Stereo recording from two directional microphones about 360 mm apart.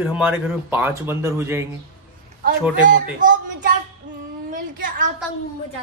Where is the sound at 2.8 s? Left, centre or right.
Right.